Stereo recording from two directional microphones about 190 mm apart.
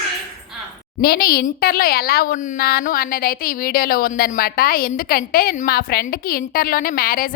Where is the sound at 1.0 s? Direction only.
55° left (ahead or behind).